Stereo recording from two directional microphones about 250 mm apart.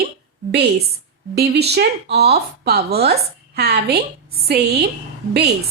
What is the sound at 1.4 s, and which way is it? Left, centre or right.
Speech, right.